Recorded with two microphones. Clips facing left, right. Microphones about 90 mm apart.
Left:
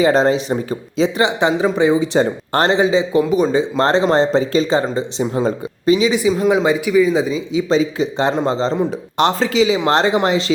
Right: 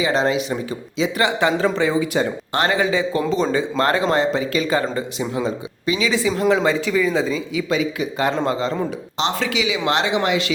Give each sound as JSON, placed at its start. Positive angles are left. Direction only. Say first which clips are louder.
{"t": 0.0, "sound": "speech", "louder": "left 5 dB", "side_deg": 35}
{"t": 1.2, "sound": "speech", "louder": "left 1 dB", "side_deg": 20}
{"t": 2.1, "sound": "speech", "louder": "left 5 dB", "side_deg": 40}
{"t": 2.7, "sound": "speech", "louder": "left 5 dB", "side_deg": 20}
{"t": 5.4, "sound": "speech", "louder": "left 5 dB", "side_deg": 40}
{"t": 6.0, "sound": "speech", "louder": "left 4 dB", "side_deg": 20}
{"t": 7.7, "sound": "speech", "louder": "left 5 dB", "side_deg": 30}